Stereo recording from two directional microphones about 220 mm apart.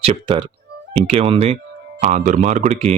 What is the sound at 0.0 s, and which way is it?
Speech, 20° right (ahead or behind).